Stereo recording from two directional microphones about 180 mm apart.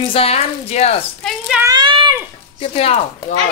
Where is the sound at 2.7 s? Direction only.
35° left (ahead or behind).